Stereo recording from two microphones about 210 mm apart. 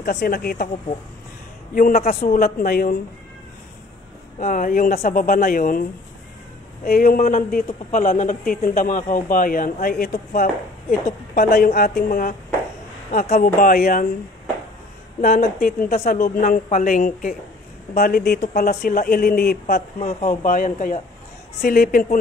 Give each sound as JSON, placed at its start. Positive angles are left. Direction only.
{"t": 0.0, "sound": "speech", "side_deg": 50}
{"t": 1.8, "sound": "speech", "side_deg": 40}
{"t": 4.4, "sound": "speech", "side_deg": 40}
{"t": 15.1, "sound": "speech", "side_deg": 40}